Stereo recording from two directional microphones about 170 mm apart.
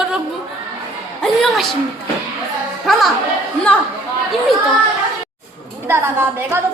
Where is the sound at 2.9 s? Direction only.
Centre (ahead or behind).